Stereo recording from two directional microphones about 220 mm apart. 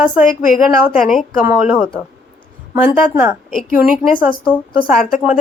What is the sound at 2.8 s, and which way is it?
A woman's voice, 5° right (ahead or behind).